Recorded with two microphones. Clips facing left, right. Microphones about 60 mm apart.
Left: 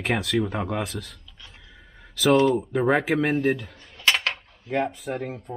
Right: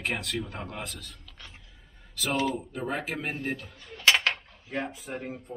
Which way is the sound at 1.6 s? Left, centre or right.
Left.